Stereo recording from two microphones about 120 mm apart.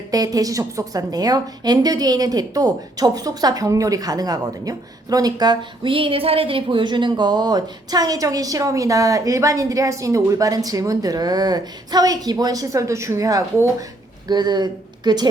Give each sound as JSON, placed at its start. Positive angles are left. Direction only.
{"t": 0.1, "sound": "a woman's voice", "side_deg": -30}